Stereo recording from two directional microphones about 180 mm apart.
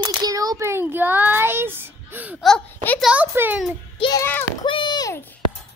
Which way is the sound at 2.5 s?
Centre (ahead or behind).